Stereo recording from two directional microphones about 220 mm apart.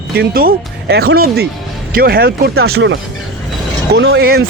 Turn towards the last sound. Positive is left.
turn(degrees=-45)  # may be behind; listen again after turning